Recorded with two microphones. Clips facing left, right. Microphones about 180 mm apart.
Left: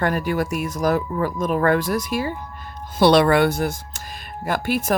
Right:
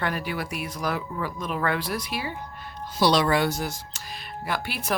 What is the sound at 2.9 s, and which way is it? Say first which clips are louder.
Speech: left 7 dB; 60° left (ahead or behind).